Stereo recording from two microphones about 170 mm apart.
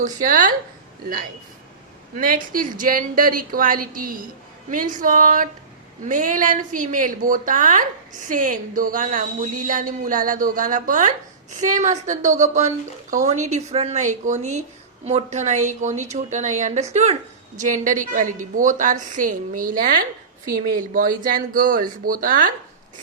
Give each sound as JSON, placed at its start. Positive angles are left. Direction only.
{"t": 0.0, "sound": "a woman's voice", "side_deg": -50}
{"t": 2.1, "sound": "a woman's voice", "side_deg": -55}